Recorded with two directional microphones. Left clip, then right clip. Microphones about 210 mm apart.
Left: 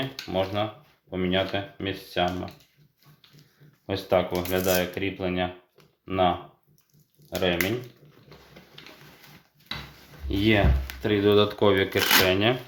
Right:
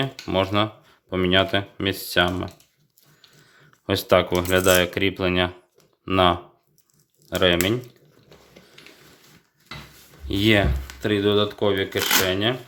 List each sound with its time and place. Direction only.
0.3 s speech: 55° right (ahead or behind)
3.8 s speech: 55° right (ahead or behind)
10.2 s speech: 35° right (ahead or behind)
11.0 s speech: 25° right (ahead or behind)
11.3 s speech: 10° right (ahead or behind)